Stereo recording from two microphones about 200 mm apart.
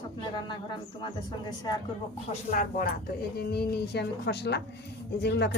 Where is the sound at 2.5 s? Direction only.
40° left (ahead or behind).